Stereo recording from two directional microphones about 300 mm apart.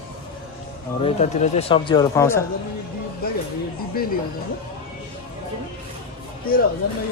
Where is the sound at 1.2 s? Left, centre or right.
Left.